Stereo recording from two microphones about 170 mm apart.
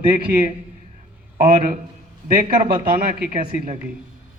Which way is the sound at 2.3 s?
55° right (ahead or behind).